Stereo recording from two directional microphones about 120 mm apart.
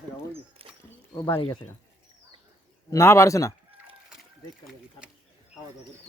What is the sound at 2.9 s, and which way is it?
Speech, 25° left (ahead or behind).